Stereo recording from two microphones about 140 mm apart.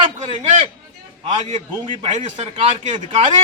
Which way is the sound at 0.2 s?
50° right (ahead or behind).